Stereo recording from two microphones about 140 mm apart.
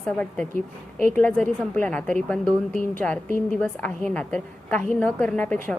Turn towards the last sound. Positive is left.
turn(degrees=10)  # may be behind; listen again after turning